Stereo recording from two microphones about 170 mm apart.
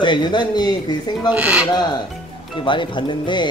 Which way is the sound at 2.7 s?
30° left (ahead or behind).